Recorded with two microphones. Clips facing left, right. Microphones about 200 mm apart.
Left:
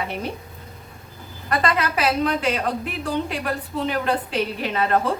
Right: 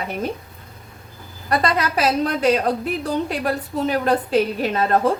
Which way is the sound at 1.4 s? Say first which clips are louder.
Right 2 dB; 40° right (ahead or behind).